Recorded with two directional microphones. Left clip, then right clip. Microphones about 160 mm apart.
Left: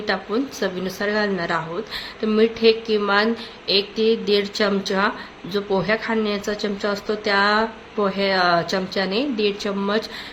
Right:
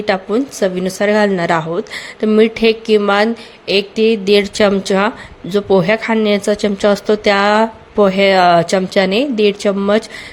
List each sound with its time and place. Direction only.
0.0 s speech: 50° right (ahead or behind)